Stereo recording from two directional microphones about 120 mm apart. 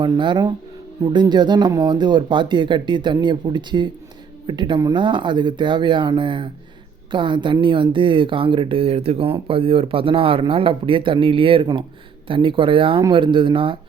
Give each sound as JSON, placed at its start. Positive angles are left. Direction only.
{"t": 0.0, "sound": "a woman's voice", "side_deg": -40}